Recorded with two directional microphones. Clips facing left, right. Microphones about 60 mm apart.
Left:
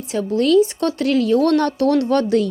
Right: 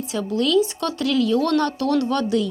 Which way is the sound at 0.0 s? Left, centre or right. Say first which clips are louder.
Left 4 dB; left.